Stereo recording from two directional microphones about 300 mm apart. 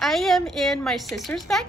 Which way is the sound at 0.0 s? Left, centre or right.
Centre.